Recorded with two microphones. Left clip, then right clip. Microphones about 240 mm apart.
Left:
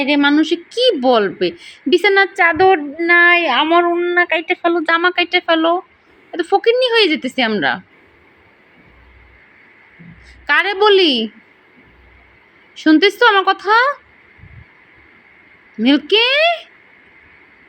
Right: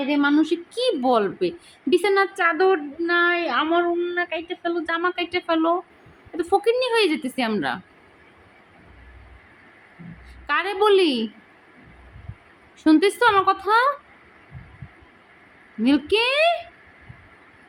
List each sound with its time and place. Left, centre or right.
0.0 s a woman's voice: centre
2.4 s female singing: centre
3.1 s a woman's voice: centre
3.3 s speech: centre
3.7 s a woman's voice: centre
4.1 s a woman's voice: centre
10.4 s a woman's voice: centre
12.8 s a woman's voice: centre
15.8 s a woman's voice: centre